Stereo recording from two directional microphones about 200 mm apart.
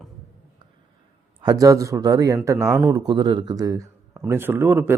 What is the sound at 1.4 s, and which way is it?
A man's voice, 20° right (ahead or behind).